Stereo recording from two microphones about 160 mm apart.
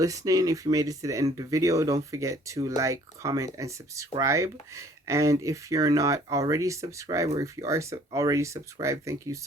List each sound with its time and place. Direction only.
0.0 s speech: 20° right (ahead or behind)